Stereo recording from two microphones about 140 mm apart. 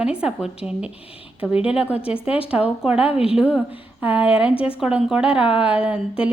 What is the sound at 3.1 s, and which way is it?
Speech, 45° left (ahead or behind).